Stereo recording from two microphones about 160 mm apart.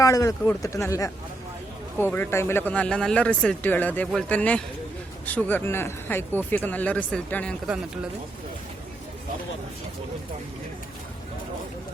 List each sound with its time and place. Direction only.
0.0 s speech: 20° left (ahead or behind)